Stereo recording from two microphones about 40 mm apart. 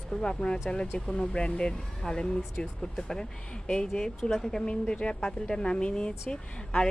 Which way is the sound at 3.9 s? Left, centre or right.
Centre.